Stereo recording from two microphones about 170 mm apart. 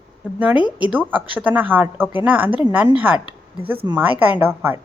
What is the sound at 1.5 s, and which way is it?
Speech, 10° right (ahead or behind).